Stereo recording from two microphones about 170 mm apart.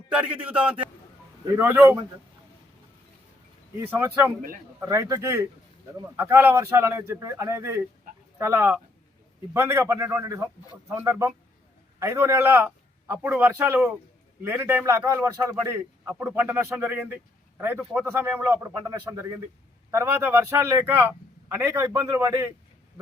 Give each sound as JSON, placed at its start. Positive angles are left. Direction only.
{"t": 0.1, "sound": "a man's voice", "side_deg": -5}
{"t": 3.8, "sound": "a man's voice", "side_deg": -10}